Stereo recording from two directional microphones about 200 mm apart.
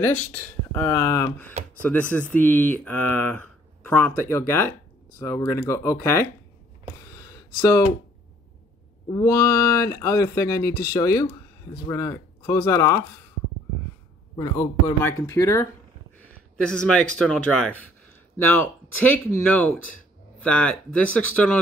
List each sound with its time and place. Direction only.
0.1 s speech: 5° left (ahead or behind)
7.0 s a sound: 15° left (ahead or behind)
9.1 s speech: 15° left (ahead or behind)
14.3 s speech: 15° left (ahead or behind)
16.2 s speech: 5° left (ahead or behind)